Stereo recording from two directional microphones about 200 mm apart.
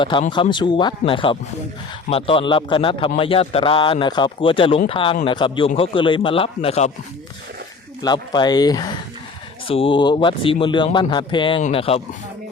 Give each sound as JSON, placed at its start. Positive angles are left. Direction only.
{"t": 0.0, "sound": "speech", "side_deg": 25}
{"t": 8.0, "sound": "speech", "side_deg": 20}